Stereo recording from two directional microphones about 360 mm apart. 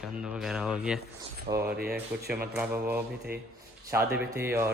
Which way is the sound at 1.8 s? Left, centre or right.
Right.